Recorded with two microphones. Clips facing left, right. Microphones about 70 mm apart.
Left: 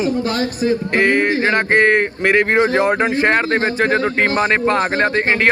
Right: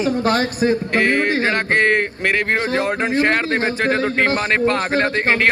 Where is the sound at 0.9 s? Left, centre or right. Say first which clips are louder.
Left 2 dB; centre.